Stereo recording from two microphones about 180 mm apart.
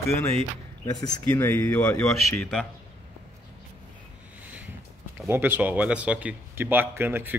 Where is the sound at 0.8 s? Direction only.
20° left (ahead or behind); by 2.7 s 5° left (ahead or behind).